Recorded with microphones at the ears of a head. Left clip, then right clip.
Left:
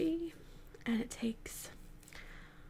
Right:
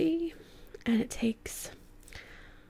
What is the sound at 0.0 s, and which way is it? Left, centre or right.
Whispering, right.